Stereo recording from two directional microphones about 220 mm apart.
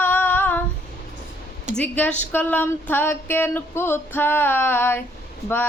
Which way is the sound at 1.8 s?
5° left (ahead or behind).